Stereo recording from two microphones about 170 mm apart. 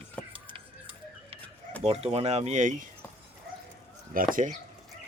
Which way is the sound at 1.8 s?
35° right (ahead or behind).